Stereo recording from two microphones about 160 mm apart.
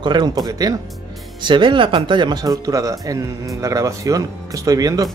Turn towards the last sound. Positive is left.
turn(degrees=-20)  # may be behind; listen again after turning